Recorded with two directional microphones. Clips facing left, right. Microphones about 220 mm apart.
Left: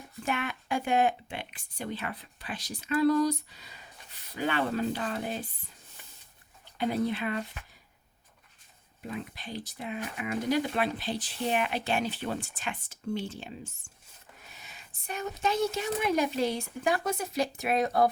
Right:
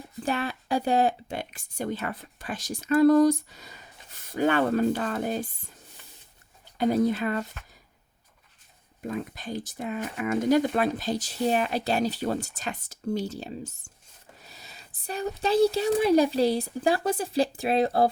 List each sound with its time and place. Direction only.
0.2 s speech: 35° right (ahead or behind)
6.7 s speech: 45° right (ahead or behind)
9.0 s speech: 45° right (ahead or behind)